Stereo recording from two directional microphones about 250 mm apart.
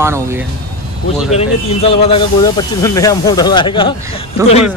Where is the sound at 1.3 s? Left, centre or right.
Left.